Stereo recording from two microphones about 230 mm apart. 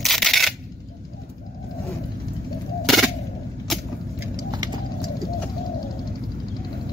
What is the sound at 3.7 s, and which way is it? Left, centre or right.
Vehicle, centre.